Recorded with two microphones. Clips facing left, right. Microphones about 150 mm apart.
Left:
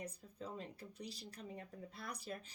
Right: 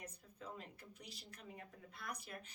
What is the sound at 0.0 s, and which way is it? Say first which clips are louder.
A woman's voice: left 5 dB; 35° left (ahead or behind).